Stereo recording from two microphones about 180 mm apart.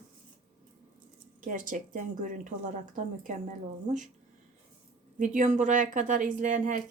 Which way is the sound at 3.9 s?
45° right (ahead or behind).